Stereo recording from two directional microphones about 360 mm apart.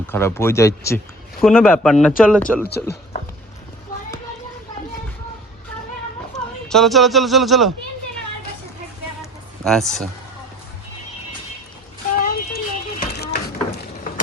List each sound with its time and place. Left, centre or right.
0.1 s speech: centre
6.7 s speech: centre
9.6 s speech: centre
12.2 s a sound: left